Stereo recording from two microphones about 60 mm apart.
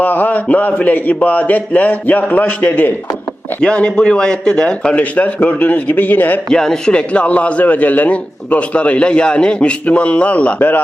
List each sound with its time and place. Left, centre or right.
0.0 s a man's voice: left
3.6 s a man's voice: centre
6.5 s a man's voice: centre; by 10.8 s left